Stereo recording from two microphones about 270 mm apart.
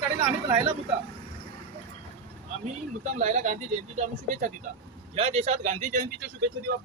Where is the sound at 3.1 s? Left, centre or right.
Right.